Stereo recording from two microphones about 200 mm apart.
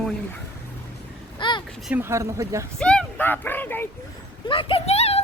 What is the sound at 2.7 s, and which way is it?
Speech, 5° left (ahead or behind).